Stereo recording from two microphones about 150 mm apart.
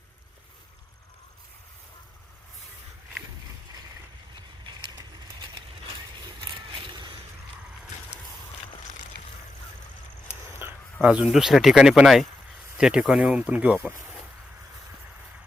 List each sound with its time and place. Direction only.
6.7 s boat: 35° right (ahead or behind)
10.6 s a sound: 15° right (ahead or behind)
11.0 s speech: 5° right (ahead or behind)